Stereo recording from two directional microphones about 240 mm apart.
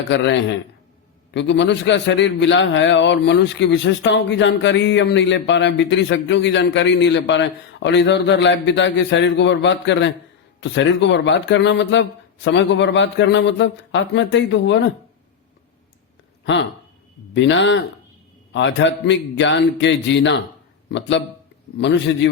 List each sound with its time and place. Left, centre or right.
0.1 s a man's voice: left
17.3 s a man's voice: left